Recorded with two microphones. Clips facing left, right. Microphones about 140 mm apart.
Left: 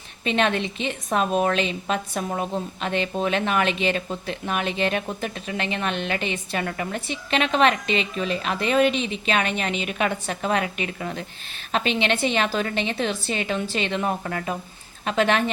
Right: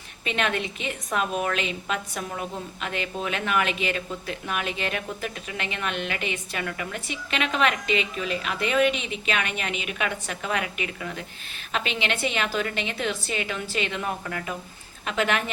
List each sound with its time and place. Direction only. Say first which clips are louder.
0.3 s a woman's voice: left 5 dB; 30° left (ahead or behind)